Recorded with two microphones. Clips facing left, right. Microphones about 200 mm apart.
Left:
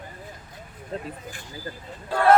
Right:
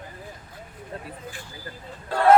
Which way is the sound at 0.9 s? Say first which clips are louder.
Left 5 dB; 25° left (ahead or behind).